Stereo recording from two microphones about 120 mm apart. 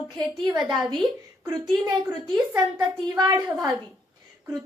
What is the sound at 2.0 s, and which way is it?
A woman's voice, 40° right (ahead or behind).